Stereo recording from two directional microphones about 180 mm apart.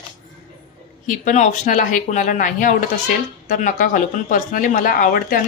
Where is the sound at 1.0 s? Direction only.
45° left (ahead or behind).